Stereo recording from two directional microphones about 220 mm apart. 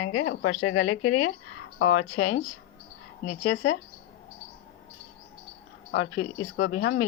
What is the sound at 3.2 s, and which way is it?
Speech, 65° left (ahead or behind).